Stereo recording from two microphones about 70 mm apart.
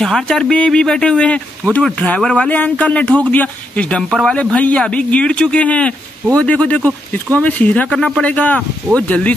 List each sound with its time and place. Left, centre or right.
0.0 s speech: centre
4.1 s speech: centre
4.4 s speech: centre